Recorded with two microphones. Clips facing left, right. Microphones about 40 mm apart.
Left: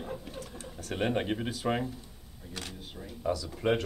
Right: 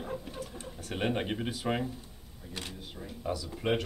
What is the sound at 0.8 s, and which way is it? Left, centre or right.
Speech, centre.